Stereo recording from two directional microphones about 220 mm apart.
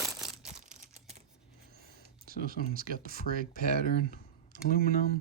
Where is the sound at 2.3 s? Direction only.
40° right (ahead or behind).